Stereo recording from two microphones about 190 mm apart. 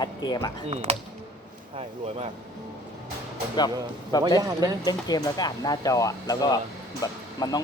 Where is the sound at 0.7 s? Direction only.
30° right (ahead or behind).